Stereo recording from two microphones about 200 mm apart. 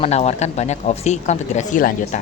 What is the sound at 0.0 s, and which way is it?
Speech, 35° left (ahead or behind).